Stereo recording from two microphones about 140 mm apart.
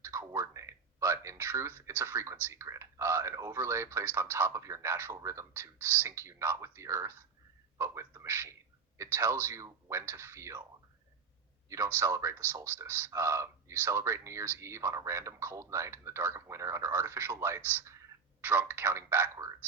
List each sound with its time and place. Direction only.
0.0 s speech: 20° right (ahead or behind)
11.9 s a man's voice: 15° right (ahead or behind)